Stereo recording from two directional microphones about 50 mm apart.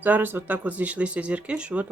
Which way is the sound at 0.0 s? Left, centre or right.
Right.